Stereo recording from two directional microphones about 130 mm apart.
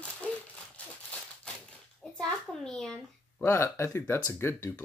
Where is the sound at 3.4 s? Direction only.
20° left (ahead or behind).